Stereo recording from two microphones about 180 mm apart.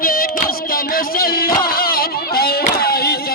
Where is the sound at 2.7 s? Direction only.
60° left (ahead or behind).